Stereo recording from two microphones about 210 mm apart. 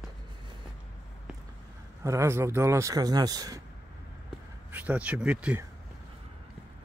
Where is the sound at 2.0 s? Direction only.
15° right (ahead or behind).